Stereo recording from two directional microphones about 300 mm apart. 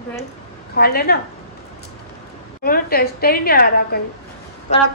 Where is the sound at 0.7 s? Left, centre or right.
Left.